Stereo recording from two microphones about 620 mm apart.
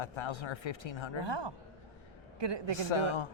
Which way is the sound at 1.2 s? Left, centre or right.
Right.